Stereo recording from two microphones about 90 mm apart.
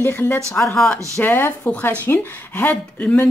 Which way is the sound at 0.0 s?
25° left (ahead or behind).